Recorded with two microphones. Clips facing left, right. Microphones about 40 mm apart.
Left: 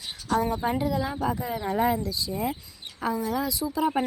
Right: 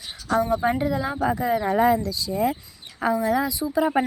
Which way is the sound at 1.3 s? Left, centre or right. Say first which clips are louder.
Right 6 dB; right.